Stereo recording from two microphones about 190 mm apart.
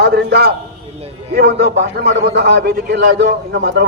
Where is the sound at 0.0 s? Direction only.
60° right (ahead or behind).